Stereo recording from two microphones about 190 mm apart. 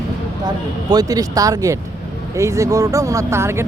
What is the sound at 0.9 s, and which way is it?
Speech, 20° right (ahead or behind).